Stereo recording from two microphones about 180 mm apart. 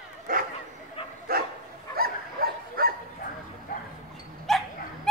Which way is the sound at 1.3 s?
55° right (ahead or behind).